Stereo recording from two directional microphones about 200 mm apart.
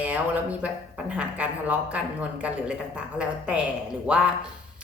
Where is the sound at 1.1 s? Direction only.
5° right (ahead or behind).